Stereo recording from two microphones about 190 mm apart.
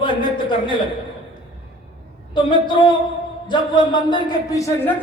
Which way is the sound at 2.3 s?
25° left (ahead or behind).